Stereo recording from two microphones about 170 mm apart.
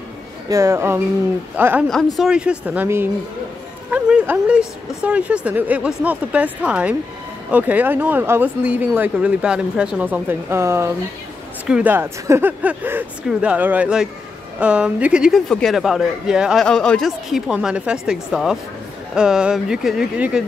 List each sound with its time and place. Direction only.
0.5 s speech: 15° right (ahead or behind)